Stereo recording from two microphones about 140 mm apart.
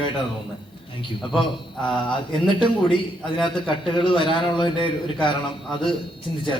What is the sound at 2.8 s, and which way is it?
A man's voice, 40° left (ahead or behind).